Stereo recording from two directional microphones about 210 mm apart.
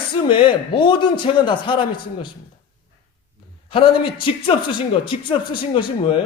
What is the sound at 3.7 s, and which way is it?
Speech, 25° left (ahead or behind).